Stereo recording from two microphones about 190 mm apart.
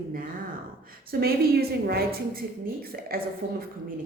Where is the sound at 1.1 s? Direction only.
55° right (ahead or behind).